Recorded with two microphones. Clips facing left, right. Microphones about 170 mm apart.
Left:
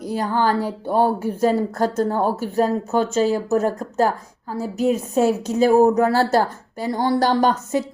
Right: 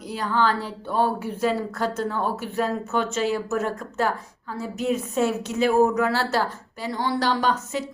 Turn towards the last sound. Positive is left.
turn(degrees=50)  # may be behind; listen again after turning